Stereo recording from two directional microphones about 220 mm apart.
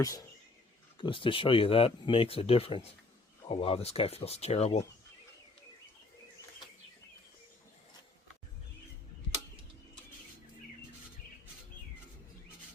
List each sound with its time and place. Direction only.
0.0 s speech: 15° left (ahead or behind)